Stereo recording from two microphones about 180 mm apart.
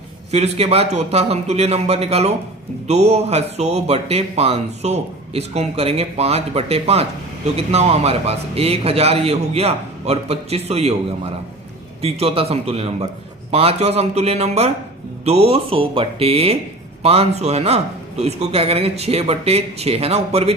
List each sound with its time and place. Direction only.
0.3 s speech: 35° right (ahead or behind)
12.0 s speech: 35° right (ahead or behind)